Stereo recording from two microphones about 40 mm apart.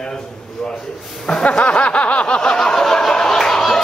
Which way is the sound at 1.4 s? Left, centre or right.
Left.